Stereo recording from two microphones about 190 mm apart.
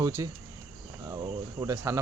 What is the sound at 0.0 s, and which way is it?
Speech, 15° right (ahead or behind).